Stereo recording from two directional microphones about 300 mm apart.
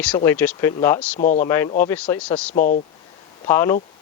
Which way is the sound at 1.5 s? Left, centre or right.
Centre.